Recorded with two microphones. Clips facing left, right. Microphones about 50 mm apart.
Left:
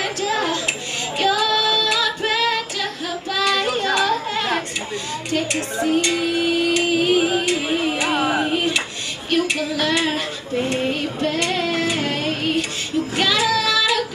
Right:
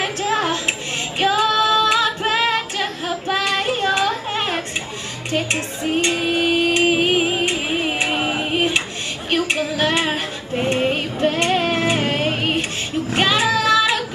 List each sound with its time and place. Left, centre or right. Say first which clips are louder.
0.0 s child singing: right 1 dB; right
5.3 s speech: right 1 dB; right
5.9 s music: right 1 dB; right
9.3 s a sound: even; right
13.1 s child singing: right 2 dB; right